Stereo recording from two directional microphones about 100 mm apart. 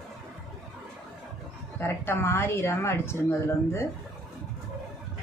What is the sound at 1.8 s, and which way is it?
A woman's voice, 25° left (ahead or behind).